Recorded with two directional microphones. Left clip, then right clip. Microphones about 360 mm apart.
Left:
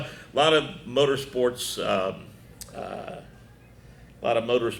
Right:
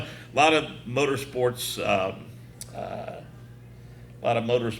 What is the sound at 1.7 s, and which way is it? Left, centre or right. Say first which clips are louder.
A man's voice: right 1 dB; centre.